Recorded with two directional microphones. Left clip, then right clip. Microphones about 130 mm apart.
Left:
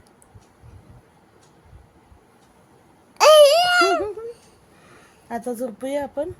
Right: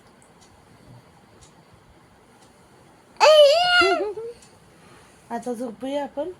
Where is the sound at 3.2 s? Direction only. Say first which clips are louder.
Left 2 dB; 40° left (ahead or behind).